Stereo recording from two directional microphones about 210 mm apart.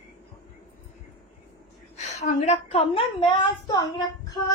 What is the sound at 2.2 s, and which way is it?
A woman's voice, 30° left (ahead or behind).